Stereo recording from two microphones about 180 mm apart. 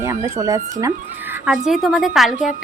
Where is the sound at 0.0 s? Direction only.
15° right (ahead or behind).